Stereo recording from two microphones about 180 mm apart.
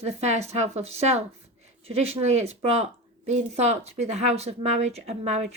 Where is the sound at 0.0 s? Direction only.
35° right (ahead or behind).